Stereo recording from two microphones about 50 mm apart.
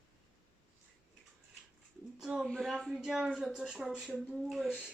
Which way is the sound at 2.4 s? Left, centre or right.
Centre.